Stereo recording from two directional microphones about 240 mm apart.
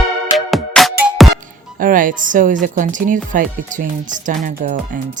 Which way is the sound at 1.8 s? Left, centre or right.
Right.